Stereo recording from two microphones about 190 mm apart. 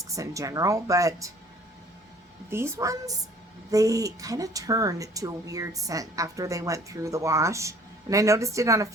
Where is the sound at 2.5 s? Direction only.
15° right (ahead or behind).